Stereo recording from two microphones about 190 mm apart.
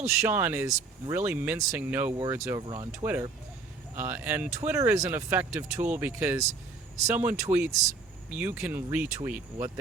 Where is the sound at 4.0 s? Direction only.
10° right (ahead or behind).